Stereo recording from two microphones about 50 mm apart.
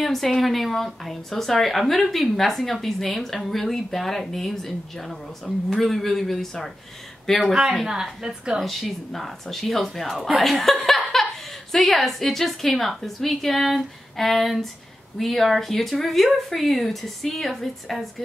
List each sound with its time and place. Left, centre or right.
0.0 s a woman's voice: centre
7.3 s a woman's voice: centre
8.5 s a woman's voice: centre
10.9 s laughter: centre
11.7 s a woman's voice: centre